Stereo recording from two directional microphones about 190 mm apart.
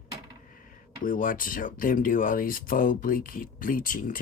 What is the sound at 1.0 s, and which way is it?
Speech, 45° left (ahead or behind).